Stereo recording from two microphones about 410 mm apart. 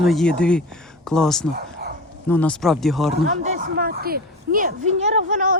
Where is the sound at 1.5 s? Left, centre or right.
Right.